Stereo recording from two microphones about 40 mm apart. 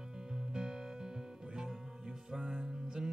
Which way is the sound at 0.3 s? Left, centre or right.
Centre.